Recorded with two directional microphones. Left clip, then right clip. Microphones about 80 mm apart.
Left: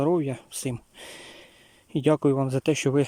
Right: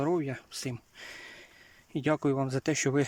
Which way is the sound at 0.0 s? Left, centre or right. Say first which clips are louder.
Left 6 dB; left.